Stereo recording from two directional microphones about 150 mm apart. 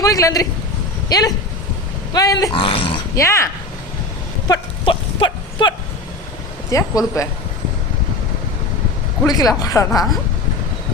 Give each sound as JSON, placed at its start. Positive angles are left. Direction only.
{"t": 0.0, "sound": "speech", "side_deg": 20}
{"t": 3.2, "sound": "speech", "side_deg": 20}
{"t": 4.4, "sound": "livestock", "side_deg": 30}
{"t": 6.7, "sound": "speech", "side_deg": 20}
{"t": 9.2, "sound": "speech", "side_deg": 25}